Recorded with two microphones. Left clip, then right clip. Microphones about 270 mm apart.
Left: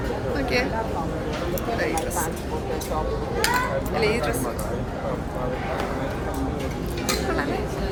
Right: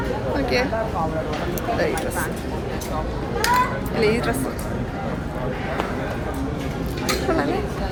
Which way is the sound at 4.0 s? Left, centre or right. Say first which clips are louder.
Right 4 dB; centre.